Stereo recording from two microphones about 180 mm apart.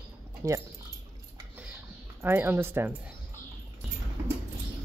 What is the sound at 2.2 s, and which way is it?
Speech, 10° right (ahead or behind).